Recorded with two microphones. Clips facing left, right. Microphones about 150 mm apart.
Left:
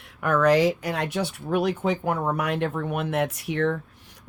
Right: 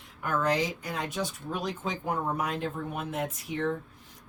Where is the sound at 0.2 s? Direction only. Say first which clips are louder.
Left 8 dB; 75° left (ahead or behind).